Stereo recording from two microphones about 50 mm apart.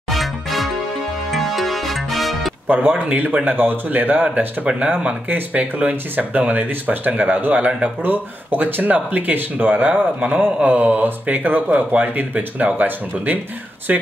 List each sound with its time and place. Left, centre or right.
0.1 s music: centre
2.7 s speech: right